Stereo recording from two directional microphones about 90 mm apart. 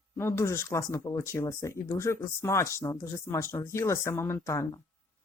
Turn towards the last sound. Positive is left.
turn(degrees=30)  # may be behind; listen again after turning